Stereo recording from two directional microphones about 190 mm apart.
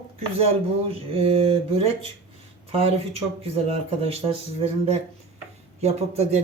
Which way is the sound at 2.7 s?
30° right (ahead or behind).